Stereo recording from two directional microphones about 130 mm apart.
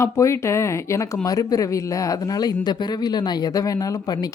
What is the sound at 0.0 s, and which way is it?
Speech, 20° left (ahead or behind).